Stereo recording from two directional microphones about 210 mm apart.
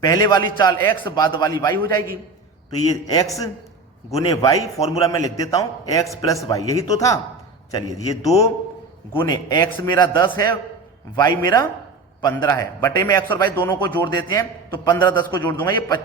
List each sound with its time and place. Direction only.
0.0 s a man's voice: 15° left (ahead or behind)